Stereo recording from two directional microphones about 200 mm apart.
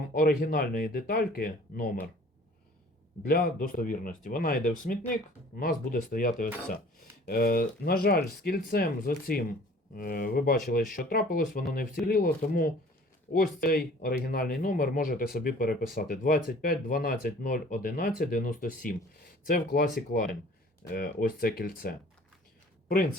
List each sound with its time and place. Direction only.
0.0 s speech: 45° left (ahead or behind)
3.2 s speech: 50° left (ahead or behind)